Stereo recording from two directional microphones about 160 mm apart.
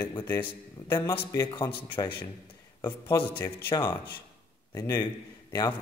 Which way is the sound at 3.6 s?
25° left (ahead or behind).